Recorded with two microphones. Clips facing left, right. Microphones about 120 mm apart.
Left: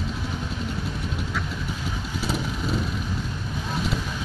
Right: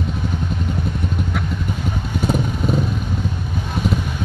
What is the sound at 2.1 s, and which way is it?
Vehicle, 50° right (ahead or behind).